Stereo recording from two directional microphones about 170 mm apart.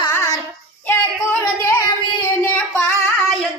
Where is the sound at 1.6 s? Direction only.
15° left (ahead or behind).